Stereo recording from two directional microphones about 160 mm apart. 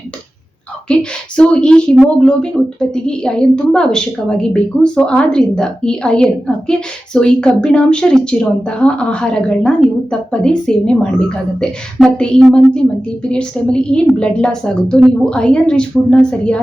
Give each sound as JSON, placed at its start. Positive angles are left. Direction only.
{"t": 1.4, "sound": "a woman's voice", "side_deg": 5}